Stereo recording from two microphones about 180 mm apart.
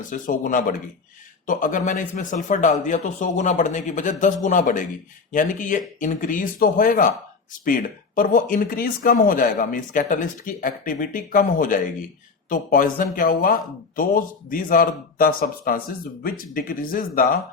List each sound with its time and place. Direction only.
0.1 s speech: 50° left (ahead or behind)